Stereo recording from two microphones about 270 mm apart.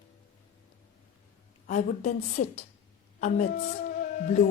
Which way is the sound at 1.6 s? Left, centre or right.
Left.